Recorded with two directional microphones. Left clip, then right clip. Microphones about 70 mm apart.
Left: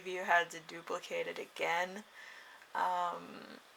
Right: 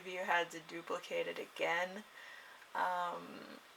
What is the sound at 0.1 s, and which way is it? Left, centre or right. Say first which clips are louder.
Speech: left 4 dB; left.